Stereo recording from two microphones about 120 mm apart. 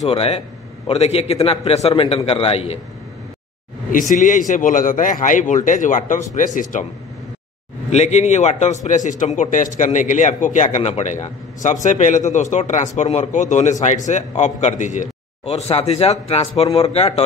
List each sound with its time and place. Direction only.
0.1 s a man's voice: 55° left (ahead or behind)
4.1 s speech: 90° left
7.9 s a man's voice: 65° left (ahead or behind); by 10.8 s 90° left
10.8 s a man's voice: 65° left (ahead or behind)
11.6 s a man's voice: 90° left; by 17.2 s 60° left (ahead or behind)